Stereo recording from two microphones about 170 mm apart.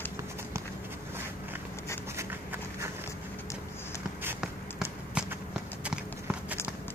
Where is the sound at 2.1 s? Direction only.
15° right (ahead or behind).